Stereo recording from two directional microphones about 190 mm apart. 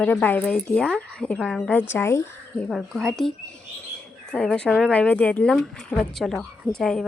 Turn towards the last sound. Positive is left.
turn(degrees=5)  # may be behind; listen again after turning